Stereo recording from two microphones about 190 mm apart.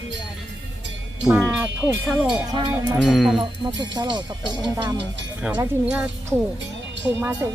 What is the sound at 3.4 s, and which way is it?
Speech, 25° right (ahead or behind).